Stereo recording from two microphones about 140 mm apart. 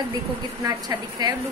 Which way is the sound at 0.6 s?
30° right (ahead or behind).